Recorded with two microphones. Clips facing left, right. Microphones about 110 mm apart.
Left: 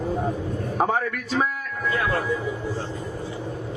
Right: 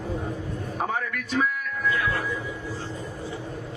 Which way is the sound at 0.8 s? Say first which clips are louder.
Left 6 dB; 35° left (ahead or behind).